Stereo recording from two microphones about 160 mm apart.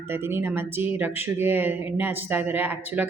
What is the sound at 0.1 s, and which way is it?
Speech, 15° right (ahead or behind).